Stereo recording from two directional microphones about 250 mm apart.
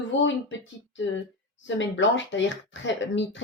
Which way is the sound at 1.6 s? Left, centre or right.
Left.